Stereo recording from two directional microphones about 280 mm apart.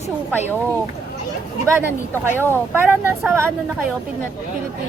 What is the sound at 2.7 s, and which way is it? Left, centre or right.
Speech, centre.